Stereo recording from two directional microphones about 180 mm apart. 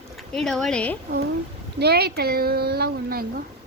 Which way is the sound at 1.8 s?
65° right (ahead or behind).